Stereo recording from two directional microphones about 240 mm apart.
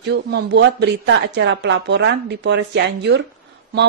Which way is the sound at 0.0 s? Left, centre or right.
Right.